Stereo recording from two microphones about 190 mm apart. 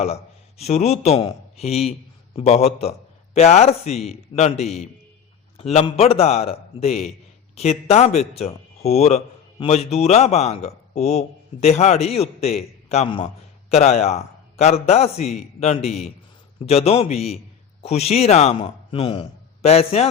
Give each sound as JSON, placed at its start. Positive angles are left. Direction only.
{"t": 0.6, "sound": "a man's voice", "side_deg": 35}